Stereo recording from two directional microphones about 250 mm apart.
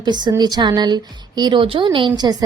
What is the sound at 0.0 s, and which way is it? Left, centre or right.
Speech, centre.